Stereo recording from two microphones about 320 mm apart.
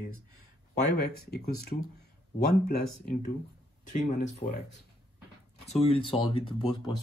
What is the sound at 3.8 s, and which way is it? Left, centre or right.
Speech, left.